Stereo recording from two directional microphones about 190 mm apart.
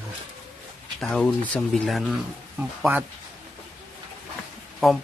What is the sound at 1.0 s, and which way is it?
Speech, 5° left (ahead or behind).